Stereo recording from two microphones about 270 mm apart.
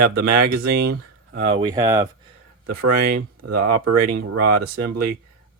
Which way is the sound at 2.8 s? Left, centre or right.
Right.